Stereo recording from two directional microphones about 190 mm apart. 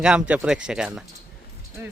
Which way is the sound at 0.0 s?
5° right (ahead or behind).